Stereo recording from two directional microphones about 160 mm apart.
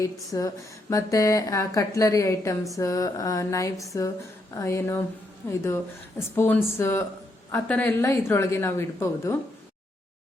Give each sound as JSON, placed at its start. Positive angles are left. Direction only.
{"t": 0.0, "sound": "speech", "side_deg": 20}